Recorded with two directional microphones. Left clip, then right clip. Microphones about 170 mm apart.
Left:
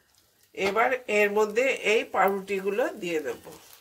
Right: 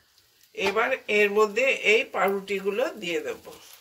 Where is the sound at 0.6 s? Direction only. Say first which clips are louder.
Even; 75° left (ahead or behind).